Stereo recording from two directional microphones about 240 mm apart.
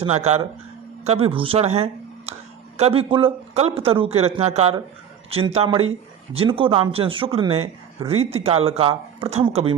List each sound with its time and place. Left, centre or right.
1.0 s speech: right